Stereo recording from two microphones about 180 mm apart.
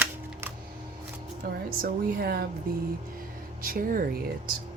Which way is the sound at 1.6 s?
55° right (ahead or behind).